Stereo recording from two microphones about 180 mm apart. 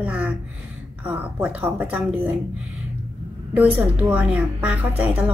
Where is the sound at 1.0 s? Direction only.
10° right (ahead or behind).